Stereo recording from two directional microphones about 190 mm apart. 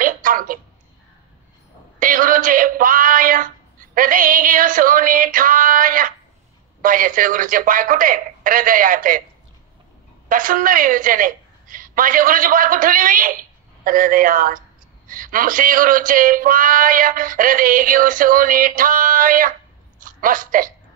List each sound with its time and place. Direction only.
0.0 s a sound: 45° right (ahead or behind)
2.0 s speech: 45° right (ahead or behind)
10.2 s a woman's voice: 45° right (ahead or behind)